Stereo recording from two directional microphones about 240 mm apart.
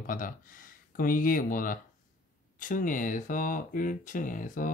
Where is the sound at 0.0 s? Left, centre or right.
Left.